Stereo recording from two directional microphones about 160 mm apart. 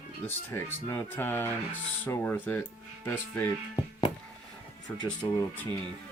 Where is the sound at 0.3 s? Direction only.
15° left (ahead or behind).